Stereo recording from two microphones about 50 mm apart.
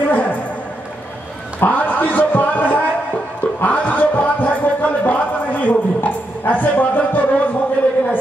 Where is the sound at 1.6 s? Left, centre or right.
Left.